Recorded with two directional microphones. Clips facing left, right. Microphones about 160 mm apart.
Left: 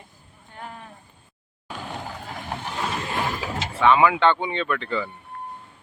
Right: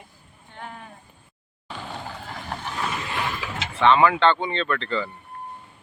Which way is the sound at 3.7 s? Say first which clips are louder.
Even; 10° left (ahead or behind).